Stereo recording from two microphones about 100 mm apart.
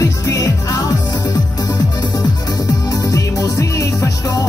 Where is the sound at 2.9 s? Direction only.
35° left (ahead or behind).